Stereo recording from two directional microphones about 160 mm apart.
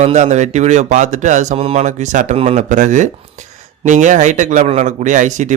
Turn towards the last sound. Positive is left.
turn(degrees=-50)  # may be behind; listen again after turning